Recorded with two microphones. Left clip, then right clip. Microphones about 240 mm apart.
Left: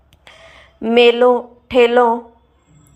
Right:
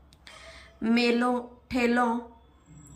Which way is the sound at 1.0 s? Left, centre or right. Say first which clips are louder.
Left 15 dB; left.